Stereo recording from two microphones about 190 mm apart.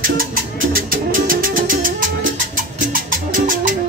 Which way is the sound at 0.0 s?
45° right (ahead or behind).